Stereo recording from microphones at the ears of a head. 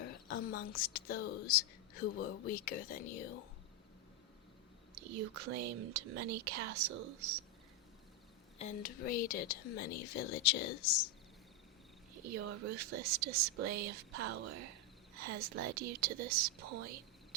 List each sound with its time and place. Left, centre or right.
0.0 s speech: left
4.9 s speech: right
8.5 s speech: left
12.1 s speech: right